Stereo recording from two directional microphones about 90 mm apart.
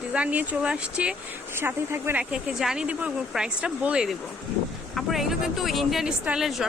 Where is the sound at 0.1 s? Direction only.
15° right (ahead or behind).